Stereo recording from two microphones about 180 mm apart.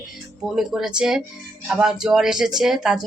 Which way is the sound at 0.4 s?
5° right (ahead or behind).